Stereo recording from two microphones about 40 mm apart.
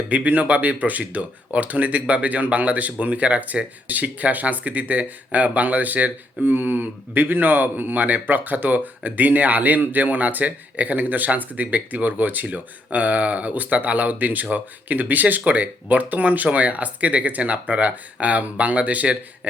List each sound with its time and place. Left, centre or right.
0.1 s speech: right